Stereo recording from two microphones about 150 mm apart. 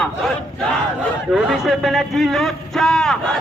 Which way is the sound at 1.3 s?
Centre (ahead or behind).